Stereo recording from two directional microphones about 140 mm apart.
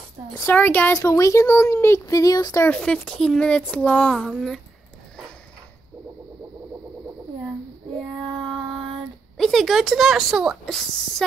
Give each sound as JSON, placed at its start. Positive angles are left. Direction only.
{"t": 0.5, "sound": "speech", "side_deg": 15}
{"t": 2.6, "sound": "speech", "side_deg": 10}
{"t": 9.4, "sound": "a woman's voice", "side_deg": 0}